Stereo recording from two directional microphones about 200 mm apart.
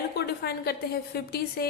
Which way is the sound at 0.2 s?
50° left (ahead or behind).